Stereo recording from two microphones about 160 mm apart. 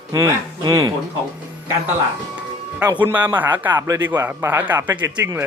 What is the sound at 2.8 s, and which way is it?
Speech, 10° right (ahead or behind).